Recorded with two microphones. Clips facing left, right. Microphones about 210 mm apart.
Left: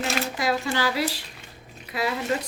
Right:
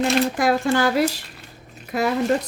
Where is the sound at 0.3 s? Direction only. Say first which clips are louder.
Right 6 dB; 50° right (ahead or behind).